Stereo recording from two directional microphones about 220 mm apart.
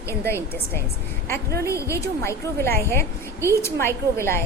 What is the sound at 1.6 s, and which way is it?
A woman's voice, 15° left (ahead or behind).